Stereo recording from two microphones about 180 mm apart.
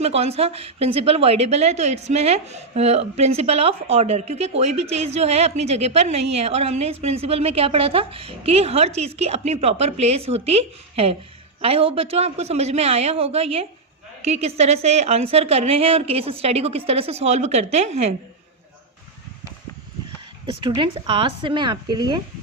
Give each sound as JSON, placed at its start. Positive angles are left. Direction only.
{"t": 0.0, "sound": "a woman's voice", "side_deg": -35}
{"t": 20.5, "sound": "speech", "side_deg": -25}